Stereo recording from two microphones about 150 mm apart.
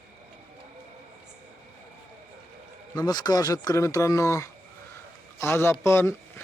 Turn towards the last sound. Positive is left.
turn(degrees=15)  # may be behind; listen again after turning